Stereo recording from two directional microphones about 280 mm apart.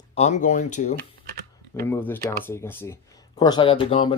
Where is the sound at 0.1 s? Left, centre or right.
Left.